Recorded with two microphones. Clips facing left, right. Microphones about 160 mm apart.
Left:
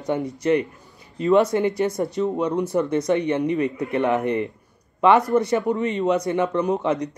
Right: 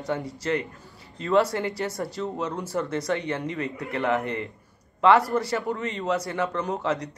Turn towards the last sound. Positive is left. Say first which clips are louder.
# left 6 dB
turn(degrees=20)  # may be behind; listen again after turning